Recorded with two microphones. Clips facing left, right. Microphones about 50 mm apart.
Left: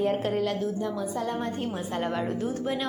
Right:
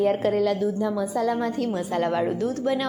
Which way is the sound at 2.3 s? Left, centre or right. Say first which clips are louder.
Right 4 dB; right.